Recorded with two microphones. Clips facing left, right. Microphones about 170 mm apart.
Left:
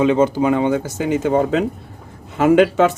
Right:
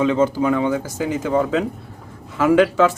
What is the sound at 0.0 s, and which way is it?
Speech, 20° left (ahead or behind).